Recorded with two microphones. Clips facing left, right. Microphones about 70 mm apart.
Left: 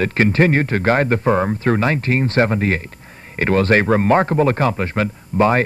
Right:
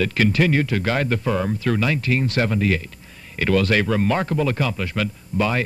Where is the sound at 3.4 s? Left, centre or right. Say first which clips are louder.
Left 4 dB; left.